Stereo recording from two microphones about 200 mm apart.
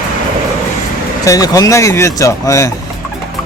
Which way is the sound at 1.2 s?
15° left (ahead or behind).